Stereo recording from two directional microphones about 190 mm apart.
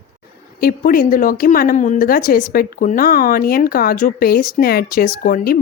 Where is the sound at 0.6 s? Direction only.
50° left (ahead or behind).